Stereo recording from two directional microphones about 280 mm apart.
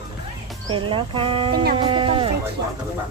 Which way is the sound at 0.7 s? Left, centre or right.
Centre.